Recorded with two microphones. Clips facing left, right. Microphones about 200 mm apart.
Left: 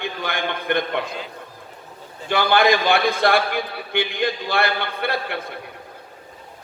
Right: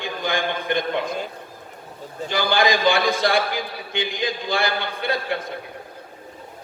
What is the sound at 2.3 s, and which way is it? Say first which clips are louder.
A man's voice: left 3 dB; 60° left (ahead or behind).